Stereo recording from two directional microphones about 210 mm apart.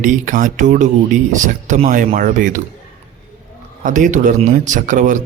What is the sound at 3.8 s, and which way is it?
A man's voice, 40° right (ahead or behind).